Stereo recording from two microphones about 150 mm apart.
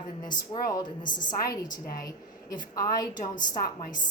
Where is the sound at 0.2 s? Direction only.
30° left (ahead or behind).